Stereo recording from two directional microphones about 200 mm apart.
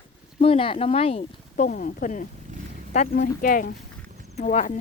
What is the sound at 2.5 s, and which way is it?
Wild animals, 40° right (ahead or behind).